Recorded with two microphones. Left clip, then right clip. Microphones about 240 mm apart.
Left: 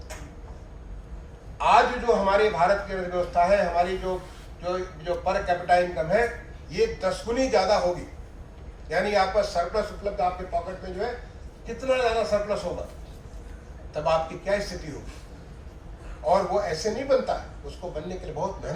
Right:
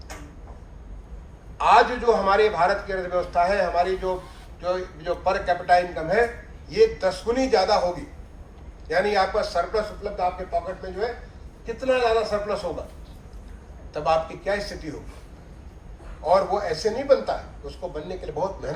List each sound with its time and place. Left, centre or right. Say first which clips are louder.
1.5 s a man's voice: right 2 dB; centre
8.9 s a man's voice: right 2 dB; centre
11.6 s a man's voice: right 2 dB; centre
13.9 s a man's voice: right 2 dB; centre
16.2 s a man's voice: right 2 dB; centre